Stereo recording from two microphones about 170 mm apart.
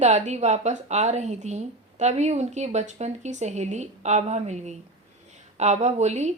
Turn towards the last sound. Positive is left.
turn(degrees=-40)  # may be behind; listen again after turning